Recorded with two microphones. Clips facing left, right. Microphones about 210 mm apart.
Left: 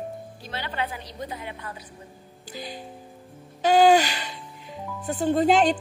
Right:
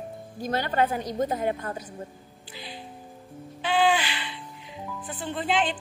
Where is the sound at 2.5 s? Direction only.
45° left (ahead or behind).